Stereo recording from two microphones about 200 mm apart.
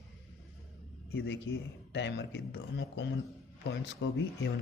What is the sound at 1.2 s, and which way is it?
Speech, 60° left (ahead or behind).